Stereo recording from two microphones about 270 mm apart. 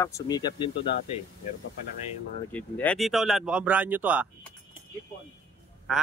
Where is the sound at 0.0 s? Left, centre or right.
Centre.